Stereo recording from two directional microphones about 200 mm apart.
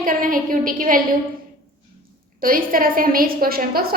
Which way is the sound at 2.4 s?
45° right (ahead or behind).